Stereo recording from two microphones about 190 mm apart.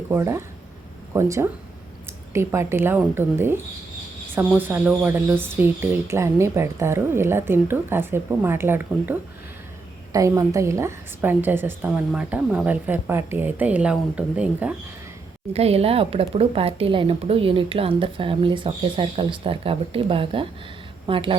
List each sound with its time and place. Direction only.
0.1 s speech: 15° right (ahead or behind)
15.5 s speech: 30° right (ahead or behind)